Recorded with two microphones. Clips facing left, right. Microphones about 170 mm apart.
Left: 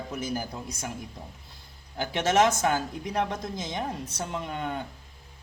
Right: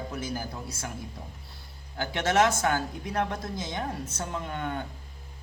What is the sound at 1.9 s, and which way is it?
A man's voice, 15° left (ahead or behind).